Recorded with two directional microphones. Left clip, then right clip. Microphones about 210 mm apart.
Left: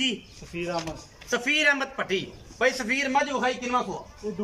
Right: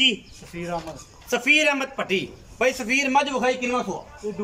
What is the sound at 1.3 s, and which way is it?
A man's voice, 5° right (ahead or behind).